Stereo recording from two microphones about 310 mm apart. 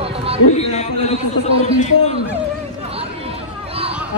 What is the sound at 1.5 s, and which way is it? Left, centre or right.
Speech, centre.